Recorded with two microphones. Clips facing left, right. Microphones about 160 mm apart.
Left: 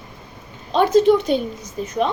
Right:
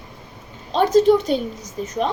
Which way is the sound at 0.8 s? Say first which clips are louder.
Even; 40° right (ahead or behind).